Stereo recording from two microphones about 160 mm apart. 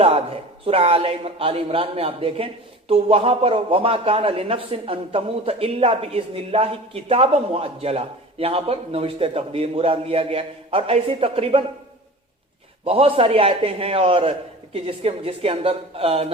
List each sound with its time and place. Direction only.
0.6 s a woman's voice: 35° right (ahead or behind)
12.8 s a woman's voice: 35° right (ahead or behind)